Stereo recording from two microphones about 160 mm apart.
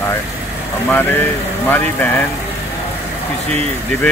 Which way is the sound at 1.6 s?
10° left (ahead or behind).